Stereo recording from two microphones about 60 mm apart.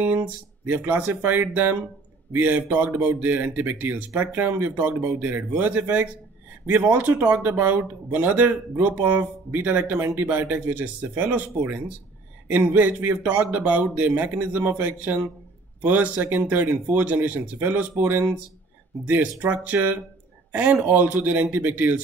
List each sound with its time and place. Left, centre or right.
0.7 s speech: right